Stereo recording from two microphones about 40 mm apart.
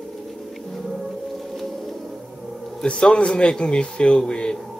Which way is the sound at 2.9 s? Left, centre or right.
Left.